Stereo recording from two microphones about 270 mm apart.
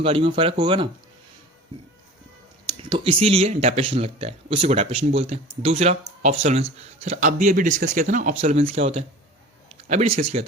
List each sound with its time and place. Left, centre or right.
0.0 s speech: centre
2.6 s speech: centre